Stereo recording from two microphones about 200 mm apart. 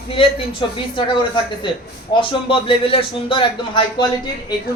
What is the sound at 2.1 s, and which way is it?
A man's voice, 25° left (ahead or behind).